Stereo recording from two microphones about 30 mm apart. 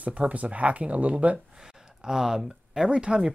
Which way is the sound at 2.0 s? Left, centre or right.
Centre.